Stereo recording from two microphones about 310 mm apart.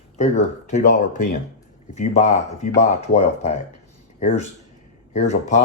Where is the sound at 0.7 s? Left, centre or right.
Left.